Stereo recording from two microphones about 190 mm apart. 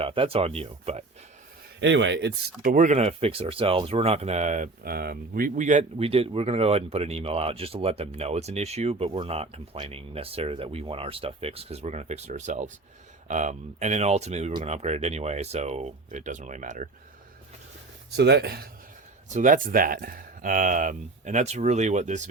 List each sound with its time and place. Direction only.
0.0 s speech: 30° right (ahead or behind)
1.8 s speech: 70° right (ahead or behind)
2.6 s speech: 40° right (ahead or behind)
18.2 s speech: 60° right (ahead or behind)
19.3 s speech: 40° right (ahead or behind)